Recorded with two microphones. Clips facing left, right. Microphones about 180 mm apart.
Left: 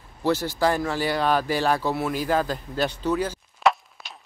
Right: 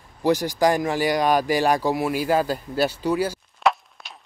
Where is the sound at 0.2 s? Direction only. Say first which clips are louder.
Right 3 dB; 15° right (ahead or behind).